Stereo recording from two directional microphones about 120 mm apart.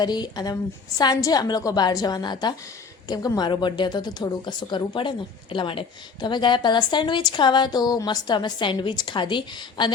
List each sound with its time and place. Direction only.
0.0 s a woman's voice: 35° left (ahead or behind)